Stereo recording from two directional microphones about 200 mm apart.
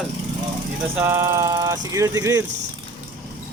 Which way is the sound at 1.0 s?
10° right (ahead or behind).